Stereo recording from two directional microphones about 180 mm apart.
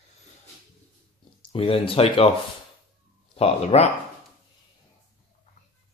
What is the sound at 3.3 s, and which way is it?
Speech, 35° left (ahead or behind).